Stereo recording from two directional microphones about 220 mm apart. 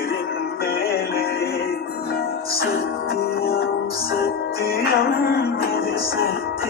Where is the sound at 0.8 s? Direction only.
45° left (ahead or behind).